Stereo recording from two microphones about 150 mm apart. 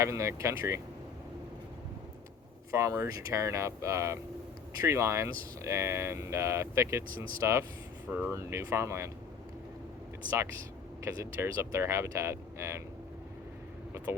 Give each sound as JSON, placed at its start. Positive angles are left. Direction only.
{"t": 0.0, "sound": "speech", "side_deg": -20}
{"t": 2.7, "sound": "speech", "side_deg": -20}
{"t": 11.0, "sound": "speech", "side_deg": -20}
{"t": 14.1, "sound": "speech", "side_deg": -15}